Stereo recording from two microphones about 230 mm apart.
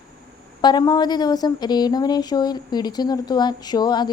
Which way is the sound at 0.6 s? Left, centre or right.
Centre.